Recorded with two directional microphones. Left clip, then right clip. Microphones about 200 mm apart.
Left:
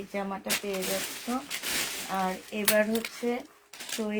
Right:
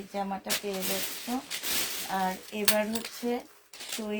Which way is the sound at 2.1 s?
30° left (ahead or behind).